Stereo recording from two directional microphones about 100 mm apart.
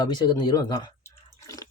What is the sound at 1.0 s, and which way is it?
Drip, 35° left (ahead or behind).